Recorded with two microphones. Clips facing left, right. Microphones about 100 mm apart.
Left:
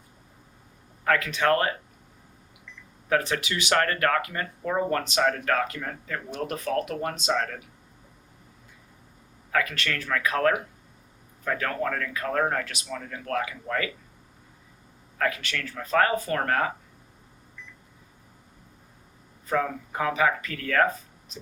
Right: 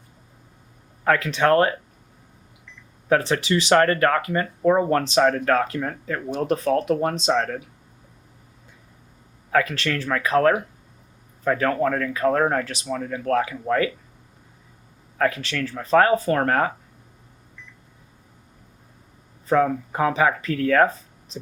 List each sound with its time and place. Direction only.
1.0 s speech: 30° right (ahead or behind)
3.1 s speech: 30° right (ahead or behind)
9.5 s speech: 35° right (ahead or behind)
15.2 s speech: 30° right (ahead or behind)
19.5 s speech: 30° right (ahead or behind)